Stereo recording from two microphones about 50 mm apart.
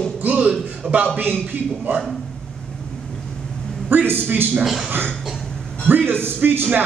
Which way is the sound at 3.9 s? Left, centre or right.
Right.